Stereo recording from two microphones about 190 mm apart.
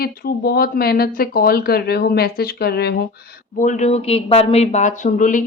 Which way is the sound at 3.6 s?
40° left (ahead or behind).